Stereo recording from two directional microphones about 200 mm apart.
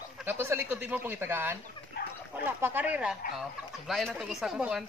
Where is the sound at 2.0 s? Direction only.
55° left (ahead or behind).